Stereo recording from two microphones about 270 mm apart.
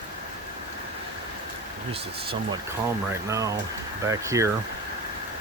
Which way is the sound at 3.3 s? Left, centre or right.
Centre.